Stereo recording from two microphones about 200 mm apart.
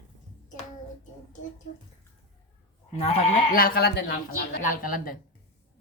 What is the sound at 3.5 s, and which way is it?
Speech, 50° left (ahead or behind).